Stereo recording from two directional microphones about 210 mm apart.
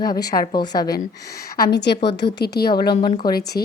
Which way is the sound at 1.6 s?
55° left (ahead or behind).